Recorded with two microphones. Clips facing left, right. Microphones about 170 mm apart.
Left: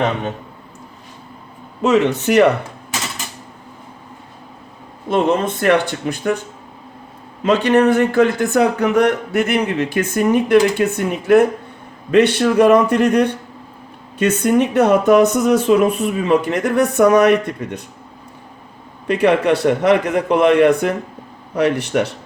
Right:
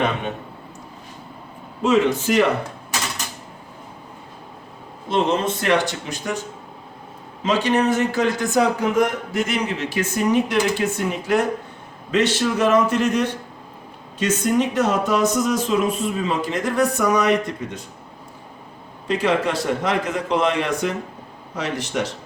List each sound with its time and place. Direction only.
1.8 s speech: 70° left (ahead or behind)
5.0 s a man's voice: 55° left (ahead or behind)
7.4 s a man's voice: 60° left (ahead or behind)
19.0 s a man's voice: 65° left (ahead or behind)